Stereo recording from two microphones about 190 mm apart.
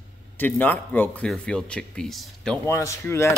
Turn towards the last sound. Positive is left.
turn(degrees=15)  # may be behind; listen again after turning